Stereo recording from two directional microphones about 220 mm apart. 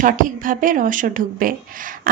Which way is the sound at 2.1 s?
40° right (ahead or behind).